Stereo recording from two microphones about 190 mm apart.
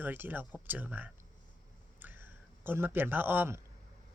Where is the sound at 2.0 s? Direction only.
10° right (ahead or behind).